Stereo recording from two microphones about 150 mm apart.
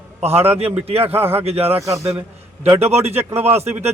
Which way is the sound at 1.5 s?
40° right (ahead or behind).